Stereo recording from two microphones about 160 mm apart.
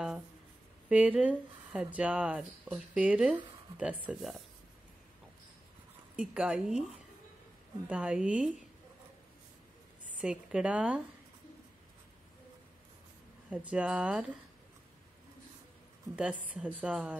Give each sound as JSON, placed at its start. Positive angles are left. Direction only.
{"t": 0.8, "sound": "speech", "side_deg": -5}
{"t": 6.1, "sound": "speech", "side_deg": -5}
{"t": 7.9, "sound": "speech", "side_deg": -5}
{"t": 10.2, "sound": "speech", "side_deg": -5}
{"t": 13.5, "sound": "speech", "side_deg": -10}
{"t": 16.2, "sound": "speech", "side_deg": -5}